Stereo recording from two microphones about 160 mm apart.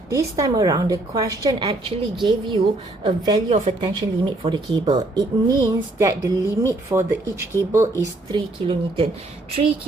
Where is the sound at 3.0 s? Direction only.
30° right (ahead or behind).